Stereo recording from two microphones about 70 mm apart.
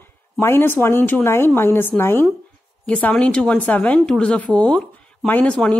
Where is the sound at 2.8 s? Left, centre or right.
Centre.